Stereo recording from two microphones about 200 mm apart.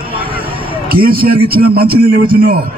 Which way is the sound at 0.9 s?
50° right (ahead or behind).